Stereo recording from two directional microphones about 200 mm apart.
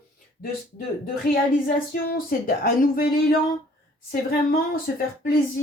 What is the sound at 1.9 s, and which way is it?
A woman's voice, 45° left (ahead or behind).